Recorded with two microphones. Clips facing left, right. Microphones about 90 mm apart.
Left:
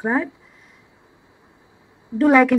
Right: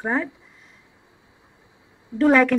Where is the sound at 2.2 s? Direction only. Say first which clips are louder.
Left 2 dB; 5° left (ahead or behind).